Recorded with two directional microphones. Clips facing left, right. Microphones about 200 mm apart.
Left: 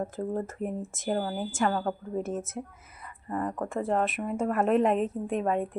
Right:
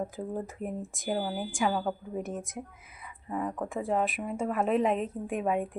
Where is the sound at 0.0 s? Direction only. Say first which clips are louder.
Left 3 dB; 5° right (ahead or behind).